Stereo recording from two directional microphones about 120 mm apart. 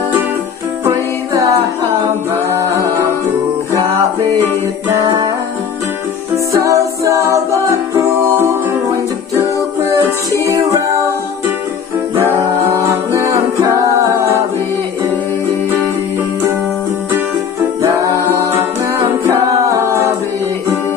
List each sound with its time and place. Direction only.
0.8 s music: 25° right (ahead or behind)
6.3 s music: 25° right (ahead or behind)